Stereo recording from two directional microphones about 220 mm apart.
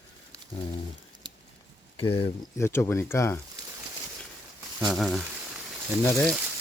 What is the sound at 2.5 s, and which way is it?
Speech, 10° left (ahead or behind).